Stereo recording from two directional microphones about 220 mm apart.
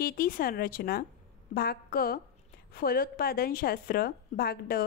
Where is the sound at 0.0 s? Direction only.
40° left (ahead or behind).